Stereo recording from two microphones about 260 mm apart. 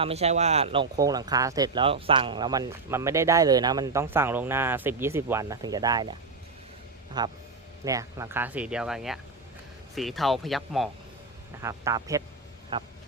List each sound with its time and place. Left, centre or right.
0.0 s speech: right
7.2 s speech: centre
11.6 s speech: centre